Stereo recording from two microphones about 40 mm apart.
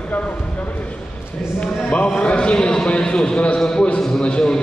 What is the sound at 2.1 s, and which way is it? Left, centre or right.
A man's voice, left.